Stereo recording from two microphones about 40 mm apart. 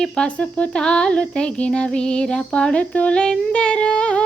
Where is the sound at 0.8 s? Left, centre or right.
Left.